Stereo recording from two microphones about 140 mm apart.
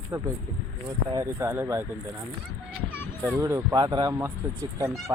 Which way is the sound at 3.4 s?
25° right (ahead or behind).